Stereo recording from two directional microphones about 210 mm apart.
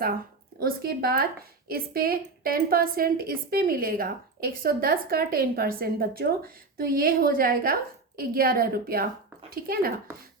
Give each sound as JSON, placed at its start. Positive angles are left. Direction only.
{"t": 0.6, "sound": "speech", "side_deg": -45}